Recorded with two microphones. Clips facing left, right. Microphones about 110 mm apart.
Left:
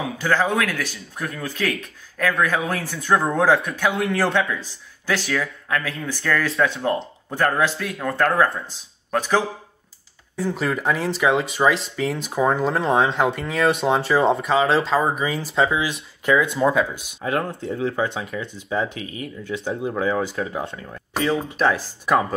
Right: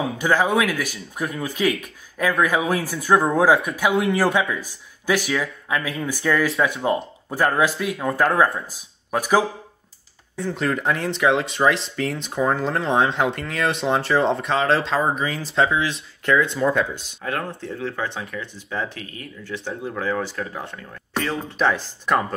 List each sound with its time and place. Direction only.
0.2 s speech: 15° right (ahead or behind)
8.1 s speech: centre (ahead or behind)
8.7 s speech: 10° right (ahead or behind)
10.4 s speech: 5° left (ahead or behind); by 20.8 s 20° left (ahead or behind)
21.1 s speech: 10° left (ahead or behind)